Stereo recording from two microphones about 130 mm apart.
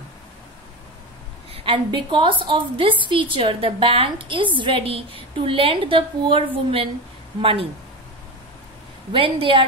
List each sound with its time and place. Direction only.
1.5 s a woman's voice: 45° right (ahead or behind)
9.1 s a woman's voice: 40° right (ahead or behind)